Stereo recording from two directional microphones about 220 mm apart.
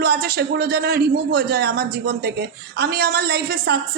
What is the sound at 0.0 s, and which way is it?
A woman's voice, 45° right (ahead or behind).